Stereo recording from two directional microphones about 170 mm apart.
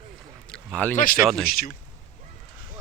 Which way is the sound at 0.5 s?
5° left (ahead or behind).